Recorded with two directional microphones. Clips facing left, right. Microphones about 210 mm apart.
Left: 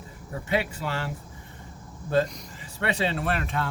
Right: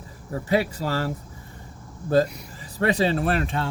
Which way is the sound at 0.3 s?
35° right (ahead or behind).